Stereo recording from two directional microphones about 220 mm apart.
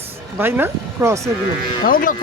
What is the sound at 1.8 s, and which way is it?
Speech, 40° left (ahead or behind).